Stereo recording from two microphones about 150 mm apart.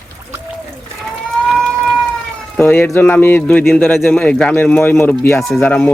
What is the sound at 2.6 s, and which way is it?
Speech, 10° left (ahead or behind).